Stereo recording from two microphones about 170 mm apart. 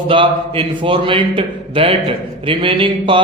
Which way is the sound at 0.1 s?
30° right (ahead or behind).